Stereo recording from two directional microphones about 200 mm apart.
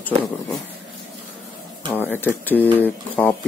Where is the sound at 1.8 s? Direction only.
10° left (ahead or behind).